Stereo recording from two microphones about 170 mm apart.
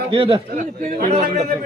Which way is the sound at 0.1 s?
30° right (ahead or behind).